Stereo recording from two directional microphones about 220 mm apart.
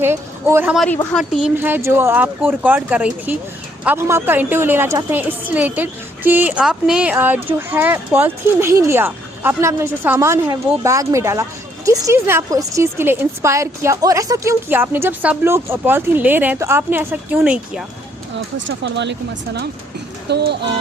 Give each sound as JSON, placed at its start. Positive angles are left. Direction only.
{"t": 0.0, "sound": "a woman's voice", "side_deg": -10}
{"t": 18.5, "sound": "speech", "side_deg": -55}
{"t": 20.2, "sound": "speech", "side_deg": -50}